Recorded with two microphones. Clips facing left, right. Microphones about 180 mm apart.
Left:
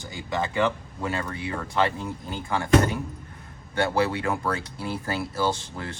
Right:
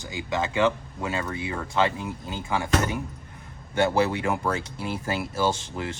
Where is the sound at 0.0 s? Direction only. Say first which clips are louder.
Right 1 dB; 20° right (ahead or behind).